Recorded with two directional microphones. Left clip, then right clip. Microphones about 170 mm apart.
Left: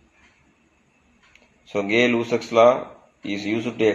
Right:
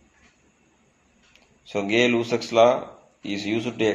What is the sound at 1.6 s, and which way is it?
A man's voice, 15° left (ahead or behind).